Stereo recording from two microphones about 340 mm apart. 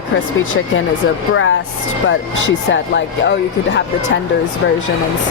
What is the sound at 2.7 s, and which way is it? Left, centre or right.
Speech, left.